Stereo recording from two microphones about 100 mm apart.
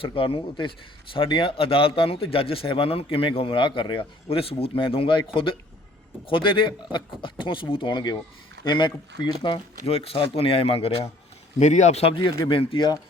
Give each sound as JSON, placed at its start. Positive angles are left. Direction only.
{"t": 0.0, "sound": "a man's voice", "side_deg": 65}
{"t": 9.8, "sound": "speech", "side_deg": 80}
{"t": 11.9, "sound": "speech", "side_deg": 90}
{"t": 12.1, "sound": "a man's voice", "side_deg": 60}